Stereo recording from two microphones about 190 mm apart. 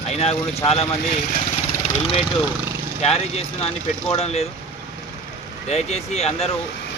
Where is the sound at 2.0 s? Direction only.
30° left (ahead or behind).